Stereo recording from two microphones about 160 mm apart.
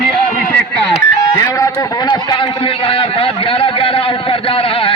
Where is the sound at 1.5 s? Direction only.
20° left (ahead or behind).